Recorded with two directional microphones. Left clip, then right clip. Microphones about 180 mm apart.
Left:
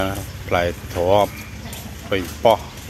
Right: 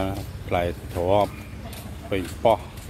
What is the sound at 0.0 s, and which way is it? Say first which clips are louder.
Speech: left 5 dB; centre (ahead or behind).